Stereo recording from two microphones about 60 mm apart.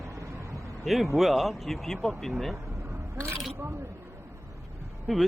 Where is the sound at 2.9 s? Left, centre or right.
Right.